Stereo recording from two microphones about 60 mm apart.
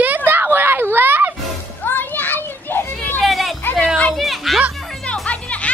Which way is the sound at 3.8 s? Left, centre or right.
Left.